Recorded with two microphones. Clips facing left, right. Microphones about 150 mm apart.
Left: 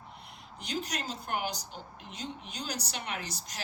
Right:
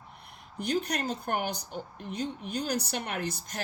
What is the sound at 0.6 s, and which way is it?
A woman's voice, 55° right (ahead or behind).